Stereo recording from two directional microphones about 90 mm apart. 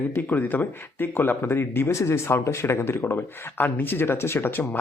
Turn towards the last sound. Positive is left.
turn(degrees=20)  # may be behind; listen again after turning